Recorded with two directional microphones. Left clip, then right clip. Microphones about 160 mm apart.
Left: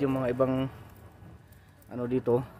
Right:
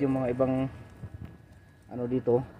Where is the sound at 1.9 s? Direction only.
25° left (ahead or behind).